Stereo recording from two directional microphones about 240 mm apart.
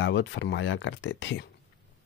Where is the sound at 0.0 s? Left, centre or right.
Left.